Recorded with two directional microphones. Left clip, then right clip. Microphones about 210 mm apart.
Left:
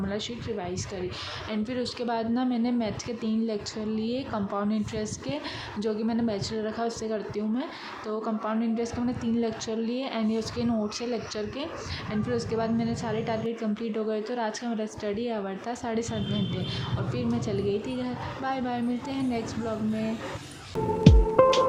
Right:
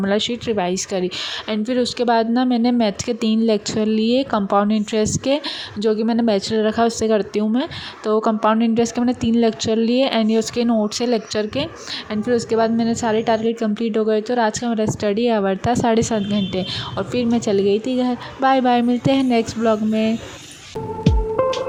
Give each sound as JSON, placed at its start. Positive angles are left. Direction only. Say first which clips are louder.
{"t": 0.0, "sound": "a woman's voice", "louder": "right 13 dB", "side_deg": -40}
{"t": 1.5, "sound": "a woman's voice", "louder": "right 11 dB", "side_deg": -30}
{"t": 21.0, "sound": "music", "louder": "right 1 dB", "side_deg": 0}